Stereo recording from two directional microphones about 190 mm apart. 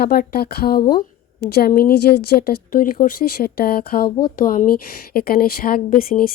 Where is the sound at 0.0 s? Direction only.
55° left (ahead or behind).